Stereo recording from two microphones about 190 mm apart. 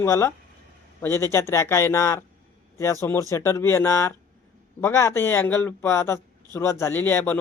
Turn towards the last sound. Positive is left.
turn(degrees=10)  # may be behind; listen again after turning